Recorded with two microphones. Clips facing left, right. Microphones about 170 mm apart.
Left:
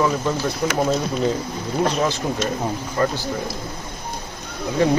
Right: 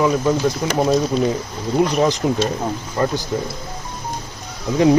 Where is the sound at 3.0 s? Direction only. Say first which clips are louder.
Right 1 dB; 20° right (ahead or behind).